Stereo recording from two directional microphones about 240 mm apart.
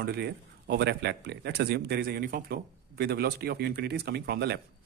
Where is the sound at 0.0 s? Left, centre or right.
Right.